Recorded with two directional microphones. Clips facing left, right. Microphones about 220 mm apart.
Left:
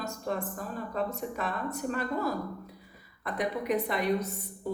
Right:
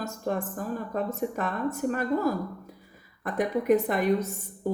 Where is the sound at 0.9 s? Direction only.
50° right (ahead or behind).